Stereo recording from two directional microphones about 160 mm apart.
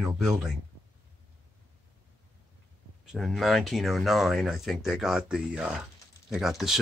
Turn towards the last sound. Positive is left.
turn(degrees=0)  # may be behind; listen again after turning